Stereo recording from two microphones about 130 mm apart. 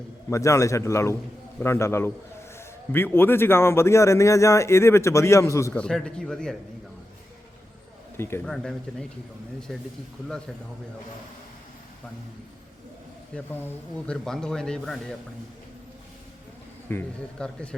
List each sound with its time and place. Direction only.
0.3 s a man's voice: 25° left (ahead or behind)
5.7 s speech: 5° left (ahead or behind)
8.1 s speech: 20° left (ahead or behind)
8.4 s speech: 5° left (ahead or behind)
13.3 s speech: 10° left (ahead or behind)
16.9 s a man's voice: 15° left (ahead or behind)